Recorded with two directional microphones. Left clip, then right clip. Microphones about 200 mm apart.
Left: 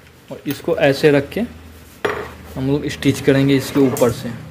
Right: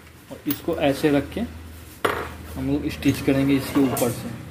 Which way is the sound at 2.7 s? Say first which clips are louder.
Left 5 dB; 35° left (ahead or behind).